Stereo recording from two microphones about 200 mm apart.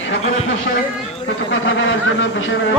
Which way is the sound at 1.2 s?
70° left (ahead or behind).